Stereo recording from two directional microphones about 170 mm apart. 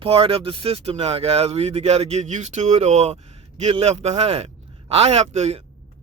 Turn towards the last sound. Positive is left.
turn(degrees=-40)  # may be behind; listen again after turning